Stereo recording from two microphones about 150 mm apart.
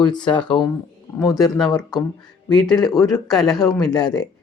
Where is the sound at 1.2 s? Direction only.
25° left (ahead or behind).